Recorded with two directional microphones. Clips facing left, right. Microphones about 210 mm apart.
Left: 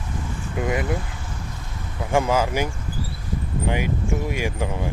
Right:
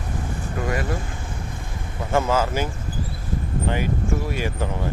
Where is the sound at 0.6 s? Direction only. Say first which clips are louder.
Left 2 dB; 20° left (ahead or behind).